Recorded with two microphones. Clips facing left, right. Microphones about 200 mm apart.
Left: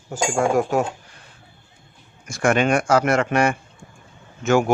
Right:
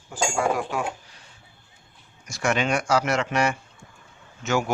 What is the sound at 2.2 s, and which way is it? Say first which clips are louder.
Speech: left 6 dB; 55° left (ahead or behind).